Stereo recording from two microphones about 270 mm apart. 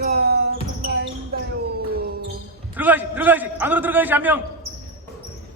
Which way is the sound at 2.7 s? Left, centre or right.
Centre.